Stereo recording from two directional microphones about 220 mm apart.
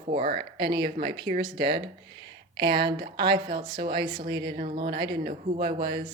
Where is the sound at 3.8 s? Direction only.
20° right (ahead or behind).